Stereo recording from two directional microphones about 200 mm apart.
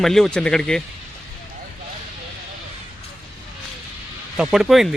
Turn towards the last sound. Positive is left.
turn(degrees=0)  # may be behind; listen again after turning